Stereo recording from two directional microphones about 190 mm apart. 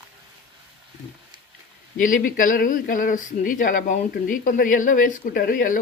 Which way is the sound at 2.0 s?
45° left (ahead or behind).